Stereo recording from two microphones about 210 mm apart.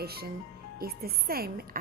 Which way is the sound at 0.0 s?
50° right (ahead or behind).